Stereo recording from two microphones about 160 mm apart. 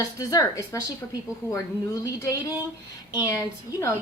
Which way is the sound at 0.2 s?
20° left (ahead or behind).